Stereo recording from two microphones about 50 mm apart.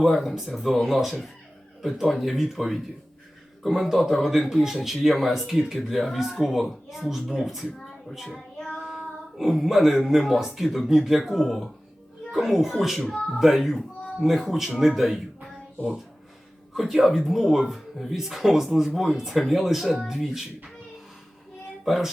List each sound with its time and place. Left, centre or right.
0.0 s speech: centre
8.5 s child singing: left
9.4 s speech: centre
16.7 s speech: centre
21.8 s speech: centre